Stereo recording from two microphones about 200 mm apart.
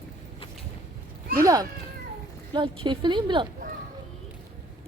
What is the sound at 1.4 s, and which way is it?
A woman's voice, 15° right (ahead or behind).